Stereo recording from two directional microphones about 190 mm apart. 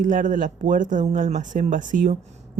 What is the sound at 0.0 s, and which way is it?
Speech, 45° right (ahead or behind).